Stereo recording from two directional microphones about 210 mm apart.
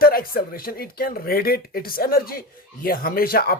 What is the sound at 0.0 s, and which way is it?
Speech, 45° left (ahead or behind).